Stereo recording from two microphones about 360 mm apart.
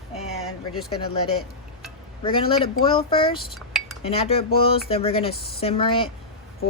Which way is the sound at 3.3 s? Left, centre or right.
Centre.